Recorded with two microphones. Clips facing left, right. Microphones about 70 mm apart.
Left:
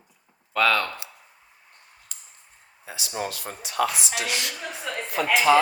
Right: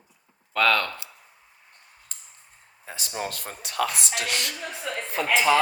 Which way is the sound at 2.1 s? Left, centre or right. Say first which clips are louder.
Even; right.